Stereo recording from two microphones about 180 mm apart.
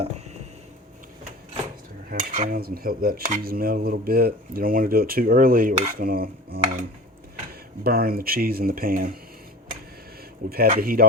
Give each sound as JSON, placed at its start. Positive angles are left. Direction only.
{"t": 2.0, "sound": "cutlery", "side_deg": -45}
{"t": 7.9, "sound": "speech", "side_deg": -55}
{"t": 10.4, "sound": "cutlery", "side_deg": -50}
{"t": 10.8, "sound": "speech", "side_deg": -55}